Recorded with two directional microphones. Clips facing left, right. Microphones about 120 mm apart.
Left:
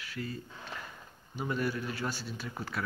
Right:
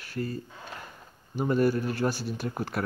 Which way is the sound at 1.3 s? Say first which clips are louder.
Right 9 dB; 45° right (ahead or behind).